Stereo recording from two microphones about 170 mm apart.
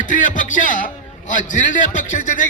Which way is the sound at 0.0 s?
50° left (ahead or behind).